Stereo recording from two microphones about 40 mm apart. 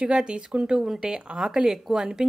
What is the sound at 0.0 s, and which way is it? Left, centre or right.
Speech, right.